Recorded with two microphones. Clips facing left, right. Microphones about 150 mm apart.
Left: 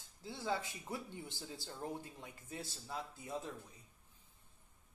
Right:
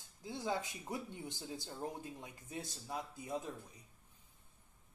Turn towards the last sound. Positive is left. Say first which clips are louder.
# right 2 dB
turn(degrees=-15)  # may be behind; listen again after turning